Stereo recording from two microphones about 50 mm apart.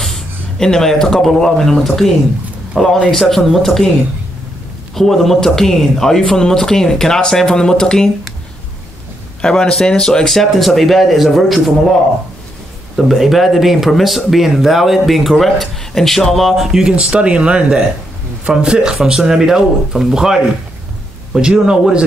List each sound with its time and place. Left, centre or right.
0.0 s speech: centre
4.9 s speech: centre
9.4 s speech: centre
12.9 s speech: centre
16.8 s speech: centre
21.4 s speech: centre